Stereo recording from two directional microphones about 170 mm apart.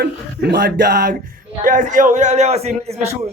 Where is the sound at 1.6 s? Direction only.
50° right (ahead or behind).